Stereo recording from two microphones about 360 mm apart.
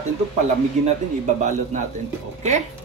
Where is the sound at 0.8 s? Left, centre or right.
Centre.